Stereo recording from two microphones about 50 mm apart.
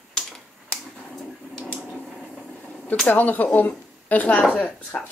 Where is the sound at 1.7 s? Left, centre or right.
Centre.